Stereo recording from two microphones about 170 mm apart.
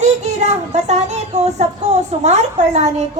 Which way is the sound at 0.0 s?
40° right (ahead or behind).